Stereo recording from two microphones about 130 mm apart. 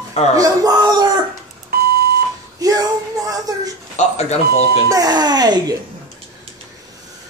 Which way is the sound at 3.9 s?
60° left (ahead or behind).